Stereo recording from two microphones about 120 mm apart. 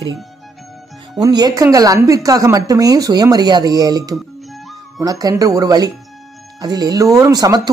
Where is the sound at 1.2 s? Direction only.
30° right (ahead or behind).